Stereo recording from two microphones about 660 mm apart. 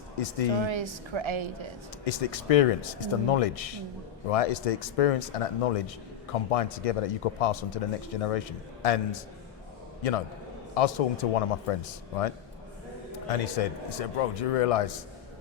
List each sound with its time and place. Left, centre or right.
0.2 s a man's voice: left
0.6 s a woman's voice: right
2.0 s a man's voice: left